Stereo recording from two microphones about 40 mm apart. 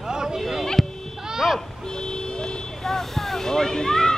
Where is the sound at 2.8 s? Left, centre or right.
Centre.